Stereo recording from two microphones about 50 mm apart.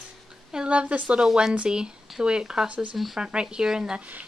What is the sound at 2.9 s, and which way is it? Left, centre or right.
Speech, centre.